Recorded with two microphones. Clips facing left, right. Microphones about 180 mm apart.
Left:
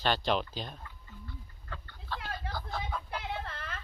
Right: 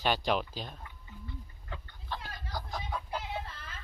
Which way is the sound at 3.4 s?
60° left (ahead or behind).